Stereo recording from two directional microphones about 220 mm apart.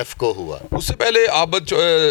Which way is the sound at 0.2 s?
35° left (ahead or behind).